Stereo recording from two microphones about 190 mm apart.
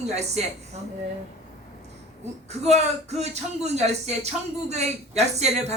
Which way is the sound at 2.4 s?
35° right (ahead or behind).